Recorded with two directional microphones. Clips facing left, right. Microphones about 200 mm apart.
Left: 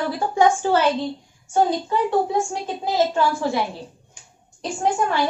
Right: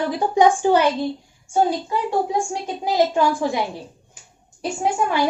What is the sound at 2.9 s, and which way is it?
Speech, 15° right (ahead or behind).